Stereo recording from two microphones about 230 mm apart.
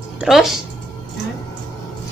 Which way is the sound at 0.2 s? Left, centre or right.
Centre.